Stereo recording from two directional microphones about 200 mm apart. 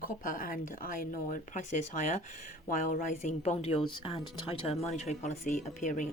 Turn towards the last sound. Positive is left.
turn(degrees=40)  # may be behind; listen again after turning